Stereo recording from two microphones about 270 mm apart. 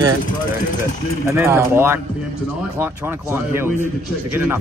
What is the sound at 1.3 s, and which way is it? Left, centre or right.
A man's voice, centre.